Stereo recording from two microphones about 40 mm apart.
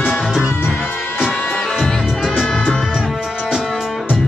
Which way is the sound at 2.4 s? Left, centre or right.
Centre.